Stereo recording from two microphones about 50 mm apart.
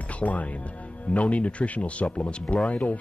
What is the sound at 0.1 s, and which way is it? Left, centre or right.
Speech, left.